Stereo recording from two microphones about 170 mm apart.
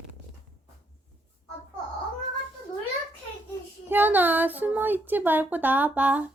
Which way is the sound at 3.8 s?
10° right (ahead or behind).